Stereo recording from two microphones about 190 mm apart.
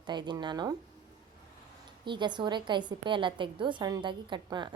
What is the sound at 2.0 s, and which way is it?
A woman's voice, 25° right (ahead or behind).